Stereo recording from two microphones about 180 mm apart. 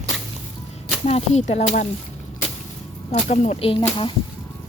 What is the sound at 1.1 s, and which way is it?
Speech, 40° left (ahead or behind).